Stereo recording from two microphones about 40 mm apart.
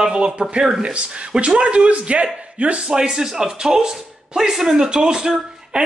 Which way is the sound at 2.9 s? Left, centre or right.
Centre.